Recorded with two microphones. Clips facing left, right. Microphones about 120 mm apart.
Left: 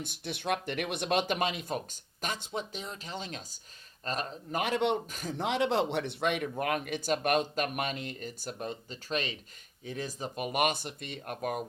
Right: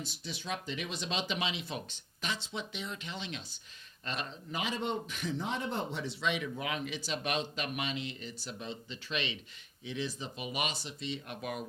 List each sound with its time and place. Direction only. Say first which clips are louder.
0.0 s speech: left 6 dB; 55° left (ahead or behind)
5.0 s speech: right 1 dB; 40° left (ahead or behind)
5.4 s speech: left 10 dB; 90° left; by 11.6 s 45° left (ahead or behind)